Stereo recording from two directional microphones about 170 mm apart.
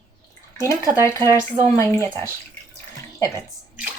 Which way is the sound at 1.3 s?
10° right (ahead or behind).